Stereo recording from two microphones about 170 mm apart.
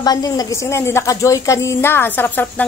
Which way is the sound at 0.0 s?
25° left (ahead or behind).